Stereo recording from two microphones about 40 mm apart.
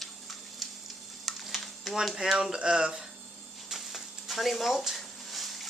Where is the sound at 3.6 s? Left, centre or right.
Centre.